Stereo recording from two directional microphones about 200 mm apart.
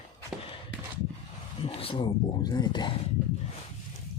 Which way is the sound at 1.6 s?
25° left (ahead or behind).